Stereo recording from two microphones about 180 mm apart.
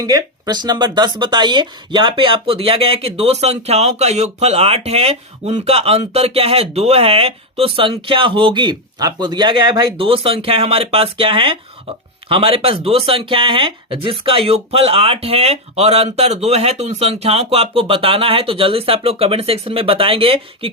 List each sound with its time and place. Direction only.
0.0 s speech: 20° right (ahead or behind)